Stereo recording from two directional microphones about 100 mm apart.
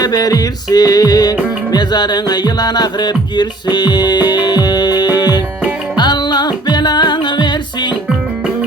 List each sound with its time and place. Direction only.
0.0 s music: 40° left (ahead or behind)